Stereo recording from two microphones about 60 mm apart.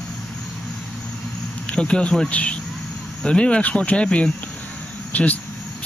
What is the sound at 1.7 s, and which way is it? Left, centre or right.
Speech, centre.